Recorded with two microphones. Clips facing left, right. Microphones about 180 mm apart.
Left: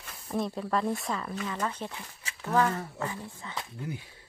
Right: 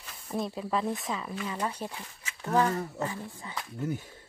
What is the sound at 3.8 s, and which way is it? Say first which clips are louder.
Speech: right 8 dB; 45° right (ahead or behind).